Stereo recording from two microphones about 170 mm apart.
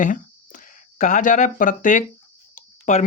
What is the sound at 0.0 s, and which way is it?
Speech, 50° left (ahead or behind).